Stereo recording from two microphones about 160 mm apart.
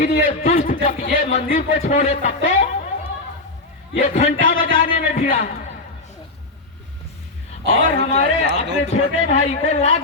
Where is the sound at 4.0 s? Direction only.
45° left (ahead or behind).